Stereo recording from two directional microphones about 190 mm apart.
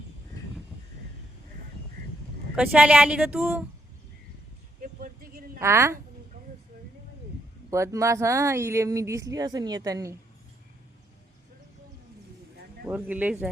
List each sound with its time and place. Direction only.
2.6 s speech: 5° right (ahead or behind)
4.8 s vehicle: 50° right (ahead or behind)
5.5 s speech: 15° right (ahead or behind)
7.7 s speech: 15° right (ahead or behind)
12.8 s speech: 10° right (ahead or behind)